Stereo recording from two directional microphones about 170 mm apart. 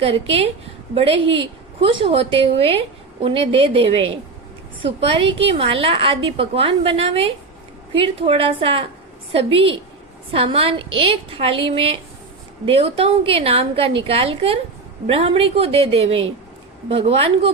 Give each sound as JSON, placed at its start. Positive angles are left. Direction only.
{"t": 0.0, "sound": "a woman's voice", "side_deg": -35}